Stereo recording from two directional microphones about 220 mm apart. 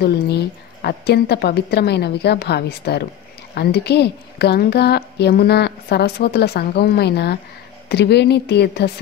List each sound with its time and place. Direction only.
0.0 s a woman's voice: 45° left (ahead or behind)